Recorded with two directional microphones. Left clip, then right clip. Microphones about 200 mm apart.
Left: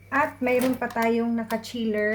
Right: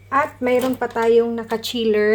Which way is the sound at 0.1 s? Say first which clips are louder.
Right 5 dB; 50° right (ahead or behind).